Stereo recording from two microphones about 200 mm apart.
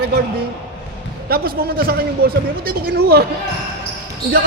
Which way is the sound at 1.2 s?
50° right (ahead or behind).